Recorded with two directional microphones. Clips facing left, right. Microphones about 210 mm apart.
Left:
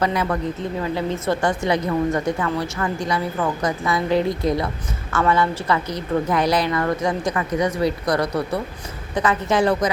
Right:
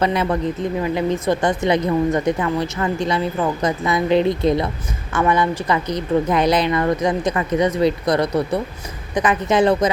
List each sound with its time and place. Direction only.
0.0 s a woman's voice: 25° right (ahead or behind)